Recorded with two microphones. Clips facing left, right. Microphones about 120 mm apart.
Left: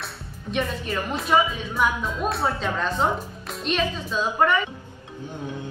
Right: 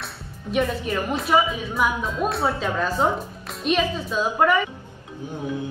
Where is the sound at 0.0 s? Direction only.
5° right (ahead or behind).